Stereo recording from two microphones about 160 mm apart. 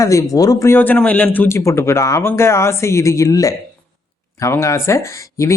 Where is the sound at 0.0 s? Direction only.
20° left (ahead or behind).